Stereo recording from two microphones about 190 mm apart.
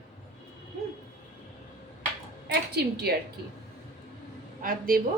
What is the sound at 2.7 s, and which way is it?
Speech, 55° right (ahead or behind).